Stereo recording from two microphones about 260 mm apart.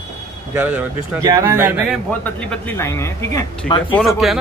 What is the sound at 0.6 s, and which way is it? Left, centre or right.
Speech, centre.